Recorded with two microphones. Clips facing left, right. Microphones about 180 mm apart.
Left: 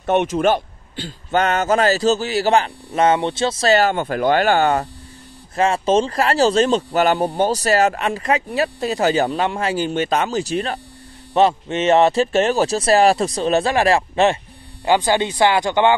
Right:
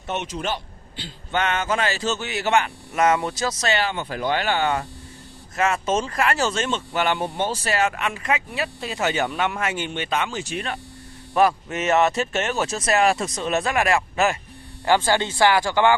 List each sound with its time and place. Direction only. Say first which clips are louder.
0.0 s speech: left 11 dB; 55° left (ahead or behind)
5.6 s speech: left 6 dB; 30° left (ahead or behind)
14.9 s speech: left 3 dB; 15° left (ahead or behind)